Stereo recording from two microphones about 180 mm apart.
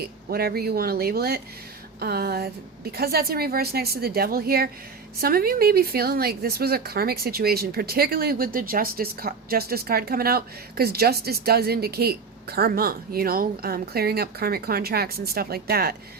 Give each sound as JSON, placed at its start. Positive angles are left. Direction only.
{"t": 0.3, "sound": "a woman's voice", "side_deg": -60}